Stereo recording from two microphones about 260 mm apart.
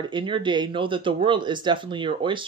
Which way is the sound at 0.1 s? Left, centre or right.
Centre.